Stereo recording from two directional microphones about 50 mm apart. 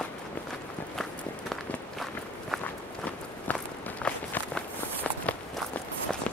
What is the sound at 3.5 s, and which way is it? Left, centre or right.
Walk, left.